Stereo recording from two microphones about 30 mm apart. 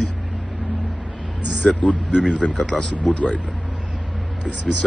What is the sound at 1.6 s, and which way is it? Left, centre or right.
Speech, left.